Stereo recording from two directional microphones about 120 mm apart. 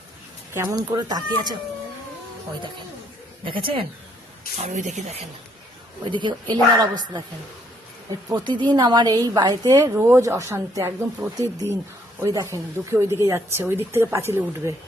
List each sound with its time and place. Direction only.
0.5 s a woman's voice: 25° right (ahead or behind)
3.4 s speech: 45° right (ahead or behind)
4.5 s speech: 85° right
6.1 s speech: 40° right (ahead or behind)
8.3 s a woman's voice: 40° right (ahead or behind); by 14.7 s 20° right (ahead or behind)